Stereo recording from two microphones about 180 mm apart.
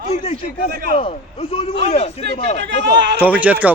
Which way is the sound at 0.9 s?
30° left (ahead or behind).